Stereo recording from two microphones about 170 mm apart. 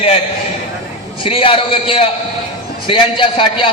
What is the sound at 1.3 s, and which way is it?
A man's voice, 30° left (ahead or behind).